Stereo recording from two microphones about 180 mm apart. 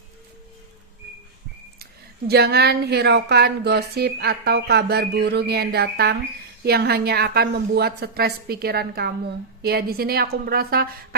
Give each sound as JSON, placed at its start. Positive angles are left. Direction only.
{"t": 1.8, "sound": "a woman's voice", "side_deg": -60}